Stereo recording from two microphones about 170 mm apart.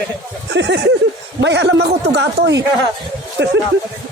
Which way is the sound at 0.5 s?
90° right.